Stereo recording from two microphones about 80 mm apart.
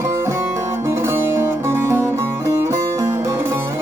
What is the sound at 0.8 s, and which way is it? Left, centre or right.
Music, right.